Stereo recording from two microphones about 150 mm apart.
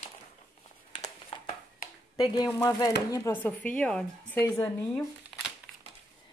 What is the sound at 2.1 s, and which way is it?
Speech, 25° left (ahead or behind).